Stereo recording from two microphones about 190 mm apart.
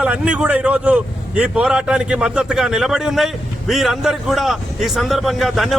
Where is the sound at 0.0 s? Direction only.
5° right (ahead or behind).